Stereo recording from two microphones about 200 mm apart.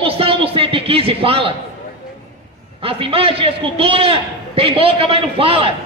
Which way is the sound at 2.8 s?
25° right (ahead or behind).